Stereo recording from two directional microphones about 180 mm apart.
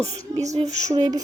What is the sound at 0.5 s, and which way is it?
Speech, 40° right (ahead or behind).